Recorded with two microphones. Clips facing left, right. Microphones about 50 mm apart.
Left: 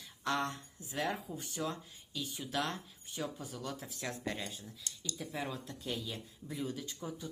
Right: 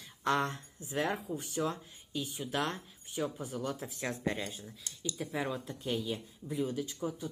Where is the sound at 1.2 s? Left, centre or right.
Centre.